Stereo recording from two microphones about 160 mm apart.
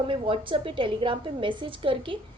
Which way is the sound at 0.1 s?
35° right (ahead or behind).